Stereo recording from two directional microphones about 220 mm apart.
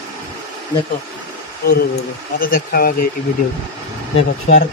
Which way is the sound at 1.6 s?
40° left (ahead or behind).